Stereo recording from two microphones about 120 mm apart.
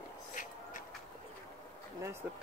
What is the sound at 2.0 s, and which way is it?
Speech, 20° right (ahead or behind).